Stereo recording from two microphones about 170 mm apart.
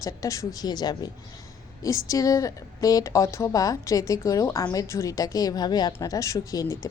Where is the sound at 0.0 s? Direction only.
20° left (ahead or behind).